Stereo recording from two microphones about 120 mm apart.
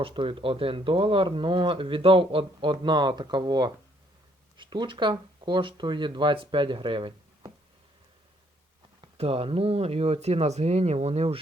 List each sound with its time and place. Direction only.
0.0 s speech: 45° right (ahead or behind)
9.0 s speech: 55° right (ahead or behind)